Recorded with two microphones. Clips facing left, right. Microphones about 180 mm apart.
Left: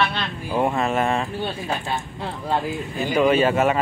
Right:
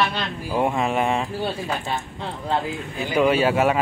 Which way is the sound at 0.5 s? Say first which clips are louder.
Left 1 dB; 10° right (ahead or behind).